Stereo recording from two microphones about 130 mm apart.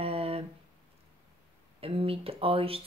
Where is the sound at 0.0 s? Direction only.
50° right (ahead or behind).